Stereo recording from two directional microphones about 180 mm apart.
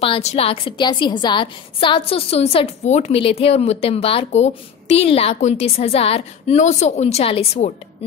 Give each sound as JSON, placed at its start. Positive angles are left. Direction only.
{"t": 0.0, "sound": "a woman's voice", "side_deg": 35}